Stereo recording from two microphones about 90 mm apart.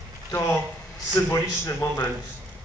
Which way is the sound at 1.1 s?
35° left (ahead or behind).